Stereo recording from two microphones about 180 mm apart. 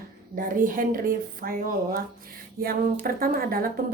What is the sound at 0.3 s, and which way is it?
A woman's voice, 50° right (ahead or behind).